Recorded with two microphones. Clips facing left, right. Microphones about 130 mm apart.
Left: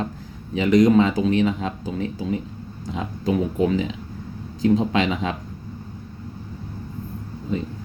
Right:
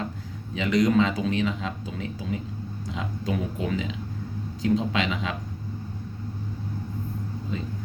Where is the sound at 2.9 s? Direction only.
30° left (ahead or behind).